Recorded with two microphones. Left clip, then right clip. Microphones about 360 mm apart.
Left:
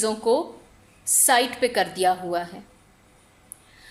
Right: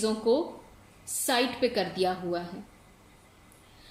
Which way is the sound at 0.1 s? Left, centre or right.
Left.